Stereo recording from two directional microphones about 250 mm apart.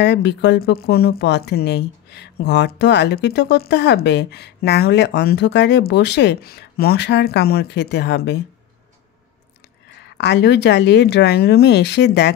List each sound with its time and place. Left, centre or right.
0.0 s speech: left
10.0 s speech: left